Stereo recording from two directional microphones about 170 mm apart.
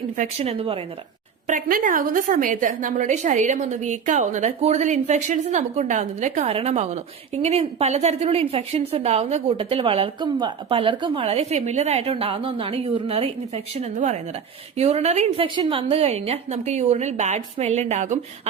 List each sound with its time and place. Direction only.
0.2 s a woman's voice: 35° right (ahead or behind)
1.5 s a woman's voice: 50° right (ahead or behind)
15.4 s a woman's voice: 30° right (ahead or behind)